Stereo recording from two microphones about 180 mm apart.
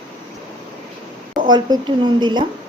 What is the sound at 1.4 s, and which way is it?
Speech, 25° right (ahead or behind).